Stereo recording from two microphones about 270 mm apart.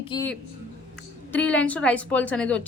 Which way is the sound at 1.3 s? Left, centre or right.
Centre.